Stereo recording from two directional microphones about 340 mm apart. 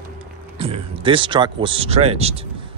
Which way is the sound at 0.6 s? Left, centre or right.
Centre.